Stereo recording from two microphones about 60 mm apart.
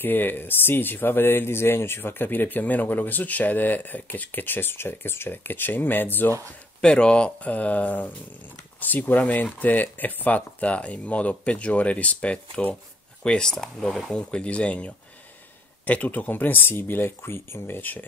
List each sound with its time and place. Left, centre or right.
0.0 s speech: left
6.8 s speech: centre; by 18.0 s left